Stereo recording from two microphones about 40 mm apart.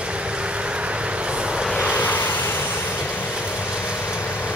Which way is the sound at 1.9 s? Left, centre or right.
Left.